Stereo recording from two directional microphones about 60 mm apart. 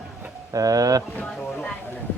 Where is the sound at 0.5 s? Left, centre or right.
Right.